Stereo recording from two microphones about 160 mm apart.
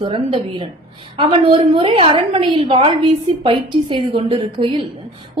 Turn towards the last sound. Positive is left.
turn(degrees=-30)  # may be behind; listen again after turning